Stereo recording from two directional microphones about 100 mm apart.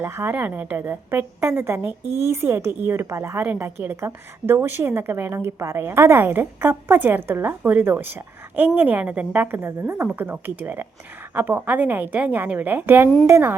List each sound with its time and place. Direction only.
0.0 s a woman's voice: 25° right (ahead or behind)